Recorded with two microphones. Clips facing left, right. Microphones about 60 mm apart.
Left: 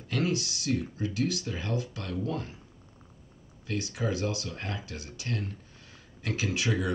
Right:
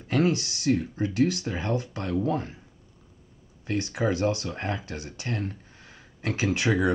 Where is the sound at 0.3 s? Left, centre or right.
Right.